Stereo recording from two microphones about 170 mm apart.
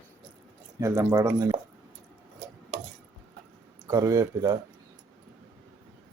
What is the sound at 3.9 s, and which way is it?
Speech, 20° right (ahead or behind).